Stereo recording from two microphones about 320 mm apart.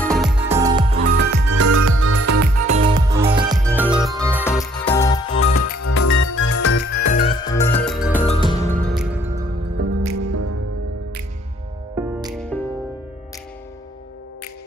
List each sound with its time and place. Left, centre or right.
0.0 s music: centre
1.2 s music: right
2.0 s music: right
2.7 s music: centre
3.4 s music: centre
4.4 s music: centre
5.4 s music: left
7.1 s music: centre
7.9 s music: centre
8.3 s music: centre
8.8 s music: centre
10.0 s music: right
12.0 s music: centre
12.4 s music: centre